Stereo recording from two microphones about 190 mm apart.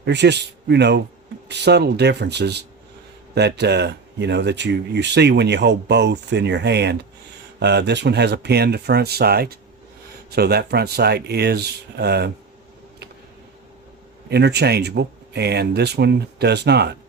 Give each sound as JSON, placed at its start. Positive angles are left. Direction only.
{"t": 0.0, "sound": "speech", "side_deg": -65}
{"t": 14.3, "sound": "speech", "side_deg": -60}